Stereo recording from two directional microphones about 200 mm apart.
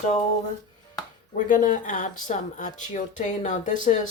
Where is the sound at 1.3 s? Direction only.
40° left (ahead or behind).